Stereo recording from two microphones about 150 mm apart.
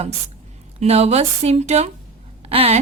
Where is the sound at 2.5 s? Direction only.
40° right (ahead or behind).